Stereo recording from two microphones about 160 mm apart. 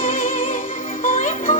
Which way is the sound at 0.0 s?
60° left (ahead or behind).